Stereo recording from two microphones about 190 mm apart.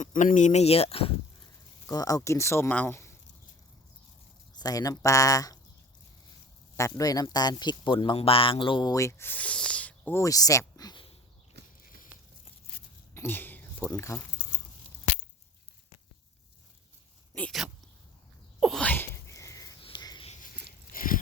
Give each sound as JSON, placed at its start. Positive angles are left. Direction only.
{"t": 0.0, "sound": "speech", "side_deg": 40}
{"t": 1.9, "sound": "speech", "side_deg": 20}
{"t": 4.5, "sound": "speech", "side_deg": 20}
{"t": 6.7, "sound": "speech", "side_deg": 15}
{"t": 11.8, "sound": "biting", "side_deg": 45}
{"t": 13.1, "sound": "a sound", "side_deg": 10}
{"t": 17.3, "sound": "speech", "side_deg": 5}
{"t": 18.6, "sound": "sneeze", "side_deg": 5}
{"t": 19.8, "sound": "a sound", "side_deg": 20}
{"t": 20.9, "sound": "a sound", "side_deg": 45}